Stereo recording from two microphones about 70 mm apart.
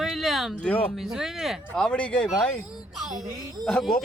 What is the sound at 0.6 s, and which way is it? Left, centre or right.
Speech, left.